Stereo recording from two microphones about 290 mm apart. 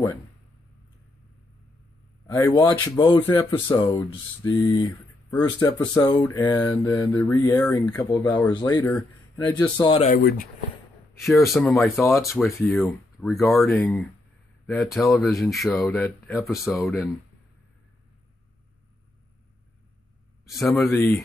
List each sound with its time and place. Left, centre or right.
2.2 s speech: centre
10.1 s speech: left
11.2 s speech: centre
20.4 s speech: centre